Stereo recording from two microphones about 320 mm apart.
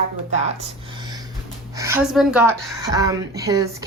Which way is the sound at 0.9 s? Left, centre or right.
Centre.